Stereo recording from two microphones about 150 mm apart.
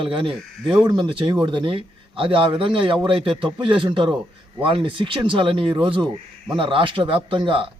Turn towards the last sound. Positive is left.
turn(degrees=-35)  # may be behind; listen again after turning